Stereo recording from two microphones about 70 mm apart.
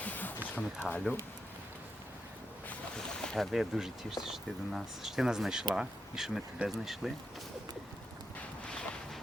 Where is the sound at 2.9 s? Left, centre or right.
Centre.